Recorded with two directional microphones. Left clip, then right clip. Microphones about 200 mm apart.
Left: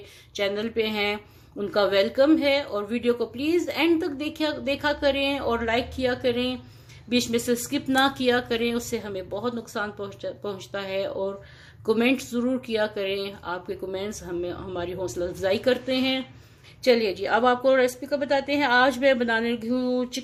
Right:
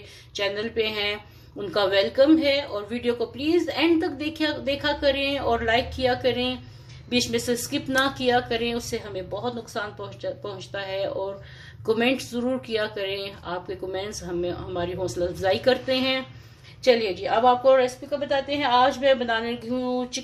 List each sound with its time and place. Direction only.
0.3 s a woman's voice: 25° left (ahead or behind)